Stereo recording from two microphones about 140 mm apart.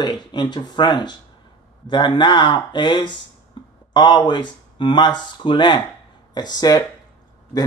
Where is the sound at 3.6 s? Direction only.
35° left (ahead or behind).